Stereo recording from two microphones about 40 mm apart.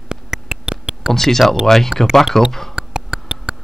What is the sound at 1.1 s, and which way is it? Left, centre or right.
Speech, centre.